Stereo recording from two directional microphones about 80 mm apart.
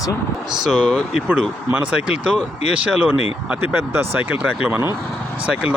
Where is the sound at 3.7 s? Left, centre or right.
Right.